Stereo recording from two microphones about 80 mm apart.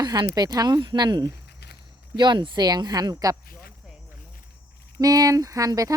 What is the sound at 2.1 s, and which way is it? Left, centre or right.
Speech, right.